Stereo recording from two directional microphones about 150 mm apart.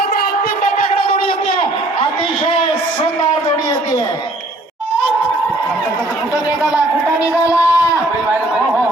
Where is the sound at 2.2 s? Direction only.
35° left (ahead or behind).